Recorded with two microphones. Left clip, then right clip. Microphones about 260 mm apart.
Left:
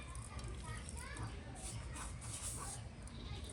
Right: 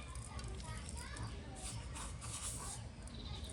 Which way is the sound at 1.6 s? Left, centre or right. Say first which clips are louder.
Right 1 dB; centre.